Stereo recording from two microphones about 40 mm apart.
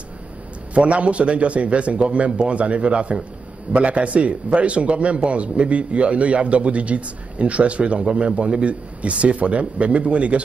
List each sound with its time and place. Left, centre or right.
0.7 s a man's voice: right